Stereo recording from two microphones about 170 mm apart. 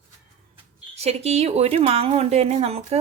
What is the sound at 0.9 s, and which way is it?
A woman's voice, 35° right (ahead or behind).